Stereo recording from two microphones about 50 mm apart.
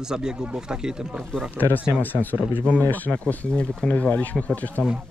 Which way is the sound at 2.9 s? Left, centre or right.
Left.